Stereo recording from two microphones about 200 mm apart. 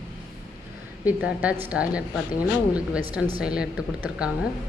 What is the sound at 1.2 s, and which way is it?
A woman's voice, 5° right (ahead or behind).